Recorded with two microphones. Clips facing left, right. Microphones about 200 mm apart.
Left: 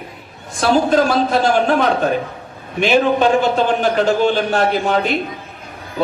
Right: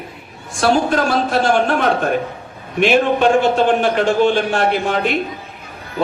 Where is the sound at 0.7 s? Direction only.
40° left (ahead or behind).